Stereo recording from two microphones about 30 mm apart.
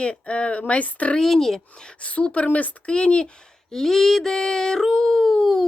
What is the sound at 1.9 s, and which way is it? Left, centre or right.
Speech, left.